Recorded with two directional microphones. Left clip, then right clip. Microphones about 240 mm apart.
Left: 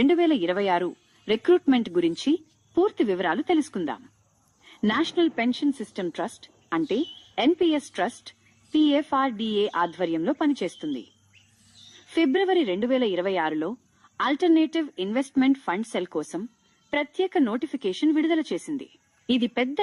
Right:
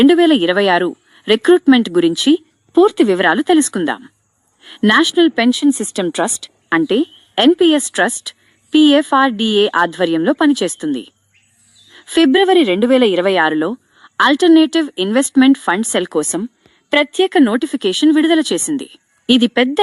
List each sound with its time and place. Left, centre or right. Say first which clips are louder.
0.0 s speech: right 11 dB; right